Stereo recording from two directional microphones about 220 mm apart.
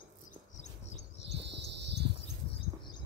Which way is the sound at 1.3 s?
50° right (ahead or behind).